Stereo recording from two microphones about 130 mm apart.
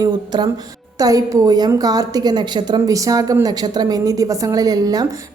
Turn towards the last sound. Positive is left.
turn(degrees=-30)  # may be behind; listen again after turning